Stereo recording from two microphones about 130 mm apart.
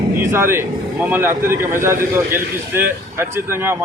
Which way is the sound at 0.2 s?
20° right (ahead or behind).